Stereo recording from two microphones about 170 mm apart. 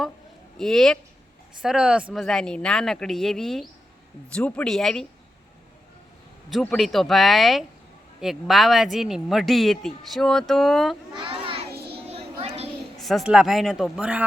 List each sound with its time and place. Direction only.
0.6 s speech: 5° left (ahead or behind)
6.5 s speech: 5° left (ahead or behind)
11.1 s a child's voice: 30° right (ahead or behind)
12.0 s a sound: 35° right (ahead or behind)
13.0 s speech: centre (ahead or behind)